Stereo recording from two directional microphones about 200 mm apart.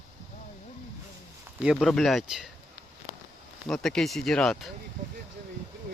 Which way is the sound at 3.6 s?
5° left (ahead or behind).